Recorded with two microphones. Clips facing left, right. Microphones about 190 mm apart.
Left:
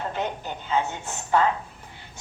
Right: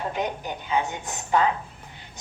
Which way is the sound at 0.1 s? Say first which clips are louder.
Right 1 dB; 15° right (ahead or behind).